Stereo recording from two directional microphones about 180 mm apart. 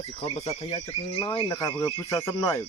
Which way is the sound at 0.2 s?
35° left (ahead or behind).